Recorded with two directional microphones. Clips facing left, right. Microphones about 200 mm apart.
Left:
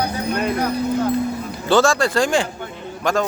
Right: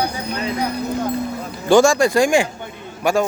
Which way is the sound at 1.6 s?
15° right (ahead or behind).